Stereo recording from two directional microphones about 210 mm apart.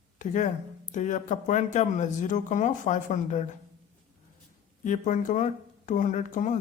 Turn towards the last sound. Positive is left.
turn(degrees=35)  # may be behind; listen again after turning